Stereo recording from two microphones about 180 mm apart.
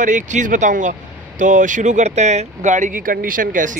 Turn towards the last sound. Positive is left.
turn(degrees=-45)  # may be behind; listen again after turning